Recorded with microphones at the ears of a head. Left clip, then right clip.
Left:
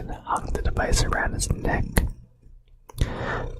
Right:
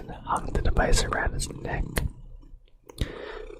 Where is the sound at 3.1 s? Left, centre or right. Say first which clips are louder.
Left 11 dB; left.